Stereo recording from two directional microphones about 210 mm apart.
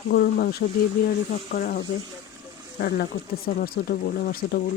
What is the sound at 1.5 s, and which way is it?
Speech, 45° left (ahead or behind).